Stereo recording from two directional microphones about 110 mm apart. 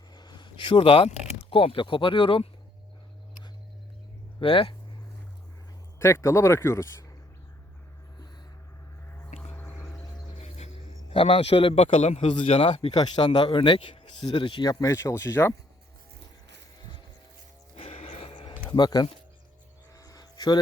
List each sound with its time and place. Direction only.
0.1 s a sound: 40° left (ahead or behind); by 1.1 s 60° left (ahead or behind)
1.5 s speech: 55° left (ahead or behind)
4.4 s speech: 55° left (ahead or behind)
6.0 s speech: 25° left (ahead or behind)
9.0 s a sound: 20° left (ahead or behind)
10.3 s music: 80° left
11.1 s a man's voice: 70° left (ahead or behind)
11.5 s a man's voice: 60° left (ahead or behind); by 12.5 s 85° left
12.5 s speech: 55° left (ahead or behind)
12.9 s speech: 40° left (ahead or behind)
14.7 s speech: 30° left (ahead or behind)
17.7 s music: 70° left (ahead or behind)
18.7 s speech: 40° left (ahead or behind)
20.0 s a sound: 35° left (ahead or behind)